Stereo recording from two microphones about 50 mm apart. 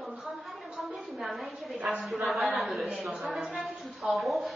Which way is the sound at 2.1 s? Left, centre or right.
Centre.